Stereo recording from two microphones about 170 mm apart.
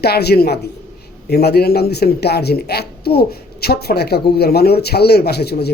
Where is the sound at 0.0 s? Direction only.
70° left (ahead or behind).